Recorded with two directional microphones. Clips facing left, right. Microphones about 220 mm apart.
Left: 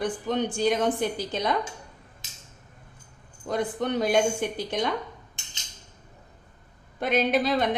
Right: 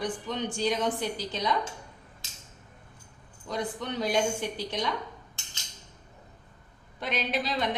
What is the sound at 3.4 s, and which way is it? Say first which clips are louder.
A woman's voice: left 6 dB; 50° left (ahead or behind).